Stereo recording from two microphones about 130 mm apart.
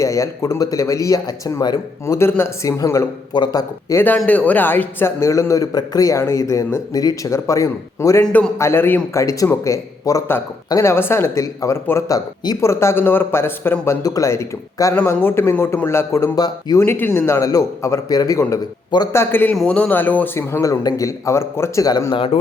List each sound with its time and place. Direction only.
0.0 s speech: 25° left (ahead or behind)
2.1 s speech: 20° left (ahead or behind)
4.3 s speech: 10° left (ahead or behind)
8.2 s a man's voice: 10° left (ahead or behind); by 16.8 s 30° left (ahead or behind)
16.8 s speech: 20° left (ahead or behind)
19.1 s a man's voice: 20° left (ahead or behind); by 22.3 s 35° left (ahead or behind)